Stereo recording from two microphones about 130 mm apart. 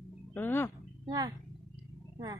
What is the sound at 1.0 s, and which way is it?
Speech, 30° right (ahead or behind).